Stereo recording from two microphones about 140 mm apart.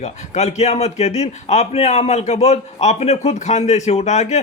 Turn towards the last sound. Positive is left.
turn(degrees=55)  # may be behind; listen again after turning